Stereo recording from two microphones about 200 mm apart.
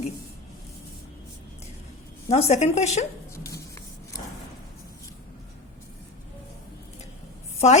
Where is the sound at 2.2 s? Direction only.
30° left (ahead or behind).